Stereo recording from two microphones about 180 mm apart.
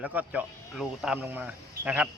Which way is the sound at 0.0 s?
10° right (ahead or behind).